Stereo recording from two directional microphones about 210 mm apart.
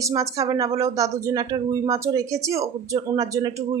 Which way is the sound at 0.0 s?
15° right (ahead or behind).